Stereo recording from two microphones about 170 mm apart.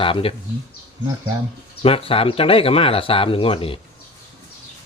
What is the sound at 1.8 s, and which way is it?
Speech, 35° left (ahead or behind).